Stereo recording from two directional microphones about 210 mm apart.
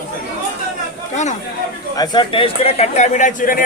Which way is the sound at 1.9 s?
20° left (ahead or behind).